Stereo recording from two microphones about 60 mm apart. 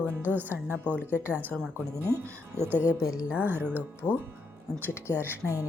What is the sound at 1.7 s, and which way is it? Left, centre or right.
Speech, right.